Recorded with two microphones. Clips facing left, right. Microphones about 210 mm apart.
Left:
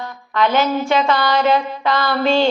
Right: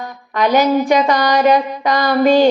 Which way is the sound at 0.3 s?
15° right (ahead or behind).